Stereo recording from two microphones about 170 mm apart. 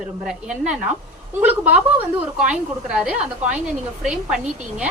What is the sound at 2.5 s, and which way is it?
A woman's voice, 5° right (ahead or behind).